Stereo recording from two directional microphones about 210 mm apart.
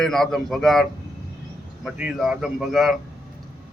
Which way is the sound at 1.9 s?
5° right (ahead or behind).